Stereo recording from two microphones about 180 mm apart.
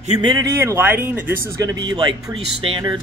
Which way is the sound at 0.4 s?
15° right (ahead or behind).